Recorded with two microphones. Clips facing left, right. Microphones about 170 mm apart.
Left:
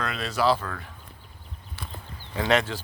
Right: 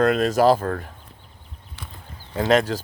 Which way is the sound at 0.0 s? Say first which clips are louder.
Right 9 dB; 45° right (ahead or behind).